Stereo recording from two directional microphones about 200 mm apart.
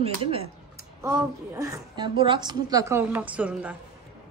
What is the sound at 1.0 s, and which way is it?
A woman's voice, 15° right (ahead or behind).